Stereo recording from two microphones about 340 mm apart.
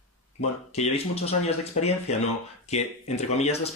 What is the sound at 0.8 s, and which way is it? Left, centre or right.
Speech, centre.